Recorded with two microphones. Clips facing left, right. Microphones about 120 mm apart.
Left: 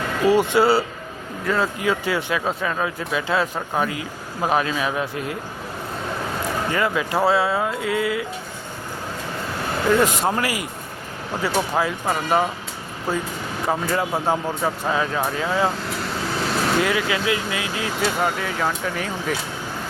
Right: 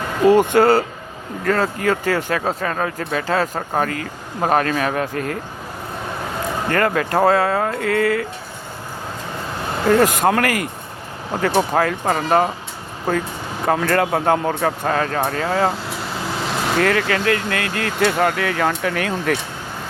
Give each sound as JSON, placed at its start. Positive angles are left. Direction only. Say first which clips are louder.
{"t": 0.3, "sound": "speech", "louder": "right 4 dB", "side_deg": -50}
{"t": 6.7, "sound": "speech", "louder": "right 5 dB", "side_deg": -55}
{"t": 9.8, "sound": "speech", "louder": "right 4 dB", "side_deg": -45}
{"t": 13.7, "sound": "speech", "louder": "right 5 dB", "side_deg": -70}
{"t": 16.8, "sound": "speech", "louder": "right 4 dB", "side_deg": -55}